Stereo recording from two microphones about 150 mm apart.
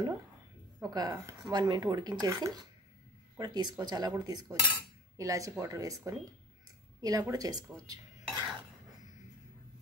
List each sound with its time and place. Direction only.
0.8 s speech: 25° right (ahead or behind)
7.8 s cutlery: 25° right (ahead or behind)